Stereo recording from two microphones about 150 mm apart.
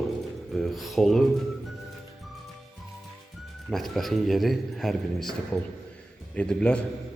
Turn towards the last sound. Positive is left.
turn(degrees=5)  # may be behind; listen again after turning